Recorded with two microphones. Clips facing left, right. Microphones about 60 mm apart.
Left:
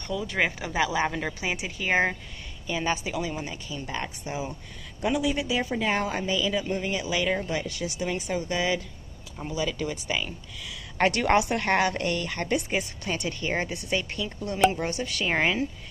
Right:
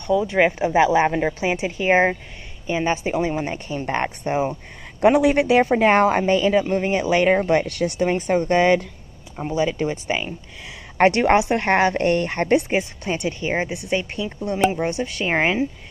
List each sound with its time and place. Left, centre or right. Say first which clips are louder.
0.3 s a woman's voice: right 9 dB; right
5.0 s speech: right 11 dB; right
9.4 s a woman's voice: right 8 dB; right